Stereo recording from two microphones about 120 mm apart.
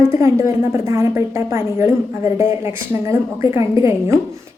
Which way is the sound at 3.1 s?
25° right (ahead or behind).